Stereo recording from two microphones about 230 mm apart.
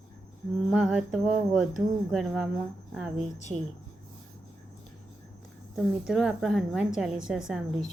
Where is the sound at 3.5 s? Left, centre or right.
Right.